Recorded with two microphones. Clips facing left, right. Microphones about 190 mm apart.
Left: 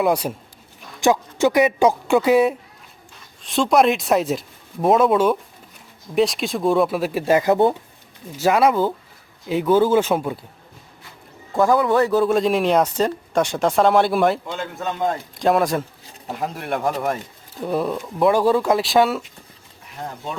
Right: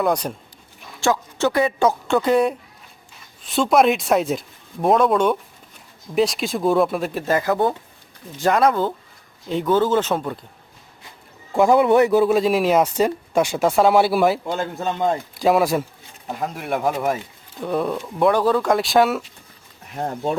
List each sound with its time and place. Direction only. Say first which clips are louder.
0.0 s speech: left 1 dB; 5° left (ahead or behind)
8.3 s speech: left 1 dB; 5° left (ahead or behind)
11.5 s a man's voice: right 2 dB; 20° right (ahead or behind)
14.4 s a man's voice: right 3 dB; 35° right (ahead or behind)
15.4 s speech: even; 5° right (ahead or behind)
20.0 s speech: right 7 dB; 45° right (ahead or behind)